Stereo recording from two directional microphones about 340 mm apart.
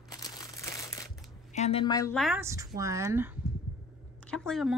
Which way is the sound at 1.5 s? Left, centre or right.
Centre.